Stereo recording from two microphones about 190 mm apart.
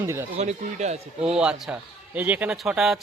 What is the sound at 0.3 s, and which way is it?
Speech, 35° right (ahead or behind).